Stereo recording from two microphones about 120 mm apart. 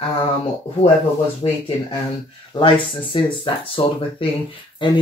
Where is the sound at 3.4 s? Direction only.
50° left (ahead or behind).